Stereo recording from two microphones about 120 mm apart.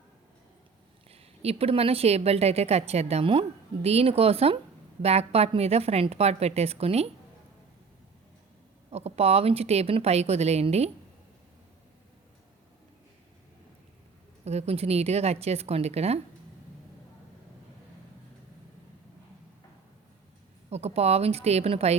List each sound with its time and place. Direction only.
1.1 s a woman's voice: 55° right (ahead or behind)
8.9 s a woman's voice: 60° right (ahead or behind)
14.4 s a woman's voice: 60° right (ahead or behind)
20.7 s a woman's voice: 60° right (ahead or behind)